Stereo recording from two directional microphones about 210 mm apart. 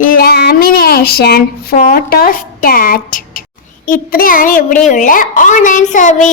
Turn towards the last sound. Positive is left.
turn(degrees=35)  # may be behind; listen again after turning